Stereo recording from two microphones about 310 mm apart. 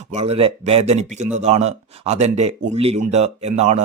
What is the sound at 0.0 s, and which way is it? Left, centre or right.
Speech, right.